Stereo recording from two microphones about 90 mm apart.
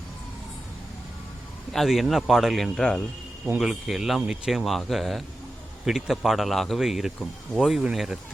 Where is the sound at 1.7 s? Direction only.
Centre (ahead or behind).